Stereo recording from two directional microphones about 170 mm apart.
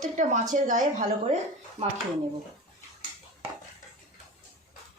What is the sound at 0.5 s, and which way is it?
Speech, 45° right (ahead or behind).